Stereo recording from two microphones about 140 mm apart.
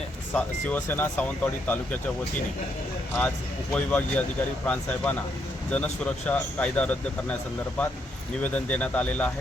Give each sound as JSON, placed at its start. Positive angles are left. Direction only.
{"t": 0.3, "sound": "speech", "side_deg": 10}
{"t": 3.2, "sound": "speech", "side_deg": 10}
{"t": 8.4, "sound": "speech", "side_deg": 10}